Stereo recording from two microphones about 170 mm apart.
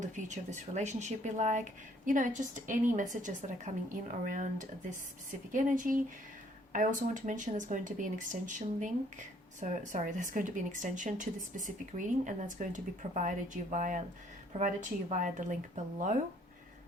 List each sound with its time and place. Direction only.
0.0 s speech: 50° right (ahead or behind)
15.1 s speech: 50° right (ahead or behind)